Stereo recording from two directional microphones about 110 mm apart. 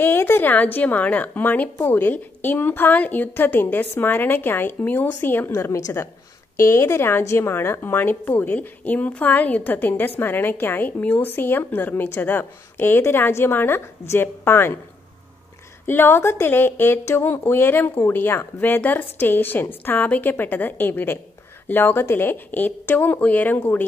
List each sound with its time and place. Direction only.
0.0 s a woman's voice: 20° left (ahead or behind)
15.9 s a woman's voice: 20° left (ahead or behind)